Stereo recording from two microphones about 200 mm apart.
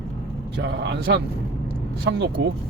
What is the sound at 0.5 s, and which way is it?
Speech, 55° right (ahead or behind).